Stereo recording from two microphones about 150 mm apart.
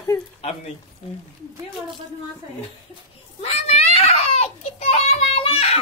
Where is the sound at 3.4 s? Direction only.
45° left (ahead or behind).